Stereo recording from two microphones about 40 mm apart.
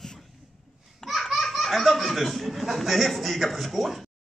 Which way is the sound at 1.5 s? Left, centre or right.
Centre.